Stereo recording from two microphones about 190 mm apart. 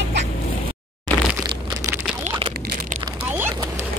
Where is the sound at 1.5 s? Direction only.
20° right (ahead or behind).